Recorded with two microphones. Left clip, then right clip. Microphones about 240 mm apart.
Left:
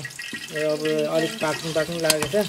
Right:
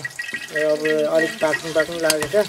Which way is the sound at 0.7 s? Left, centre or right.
Right.